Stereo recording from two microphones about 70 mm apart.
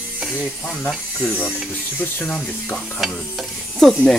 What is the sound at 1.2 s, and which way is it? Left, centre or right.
Speech, centre.